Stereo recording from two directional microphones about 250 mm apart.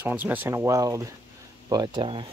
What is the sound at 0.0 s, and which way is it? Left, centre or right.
Speech, centre.